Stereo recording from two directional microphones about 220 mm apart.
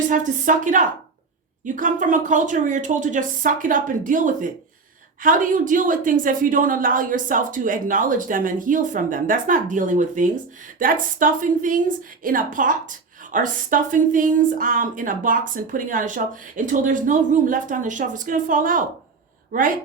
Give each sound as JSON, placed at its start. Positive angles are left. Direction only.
{"t": 0.1, "sound": "a woman's voice", "side_deg": -35}